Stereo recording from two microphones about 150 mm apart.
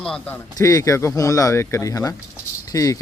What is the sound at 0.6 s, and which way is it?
Speech, 20° left (ahead or behind).